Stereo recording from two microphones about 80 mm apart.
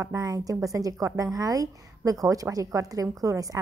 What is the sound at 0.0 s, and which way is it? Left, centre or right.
A woman's voice, right.